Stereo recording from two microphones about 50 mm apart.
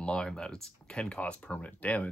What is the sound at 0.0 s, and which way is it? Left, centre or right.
Speech, centre.